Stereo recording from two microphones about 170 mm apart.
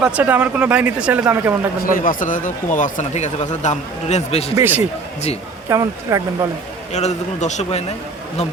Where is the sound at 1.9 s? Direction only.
50° left (ahead or behind).